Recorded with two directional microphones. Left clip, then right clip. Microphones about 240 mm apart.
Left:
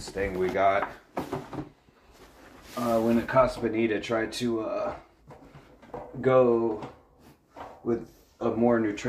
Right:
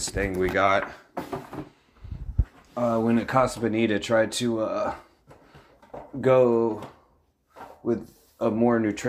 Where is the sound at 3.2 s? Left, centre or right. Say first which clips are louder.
Even; right.